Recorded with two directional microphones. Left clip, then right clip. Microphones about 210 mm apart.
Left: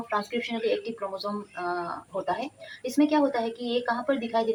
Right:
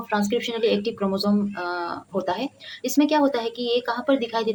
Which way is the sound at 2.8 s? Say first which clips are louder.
Right 4 dB; 50° right (ahead or behind).